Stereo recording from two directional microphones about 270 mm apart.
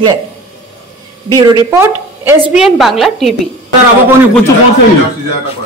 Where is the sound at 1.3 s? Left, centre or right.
Centre.